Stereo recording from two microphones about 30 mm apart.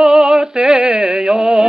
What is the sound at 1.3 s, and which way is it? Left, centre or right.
Music, centre.